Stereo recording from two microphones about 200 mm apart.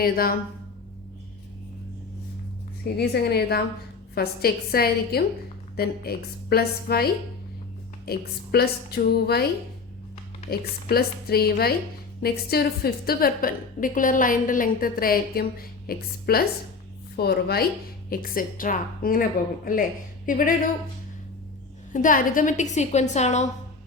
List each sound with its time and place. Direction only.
0.0 s a woman's voice: 45° left (ahead or behind)
2.8 s a woman's voice: 55° left (ahead or behind)
10.5 s a woman's voice: 50° left (ahead or behind)
21.9 s a woman's voice: 40° left (ahead or behind)